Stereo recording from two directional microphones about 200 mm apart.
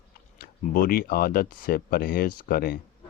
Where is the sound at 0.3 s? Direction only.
45° left (ahead or behind).